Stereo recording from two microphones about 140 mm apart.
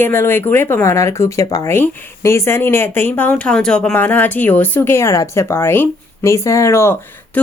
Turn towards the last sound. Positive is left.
turn(degrees=20)  # may be behind; listen again after turning